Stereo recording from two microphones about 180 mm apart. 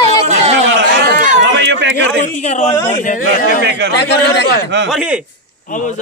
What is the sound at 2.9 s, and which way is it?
Speech, 45° left (ahead or behind).